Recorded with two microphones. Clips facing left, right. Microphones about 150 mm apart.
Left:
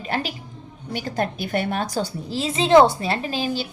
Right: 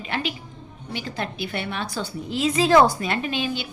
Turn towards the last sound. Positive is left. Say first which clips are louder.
# left 1 dB
turn(degrees=35)  # may be behind; listen again after turning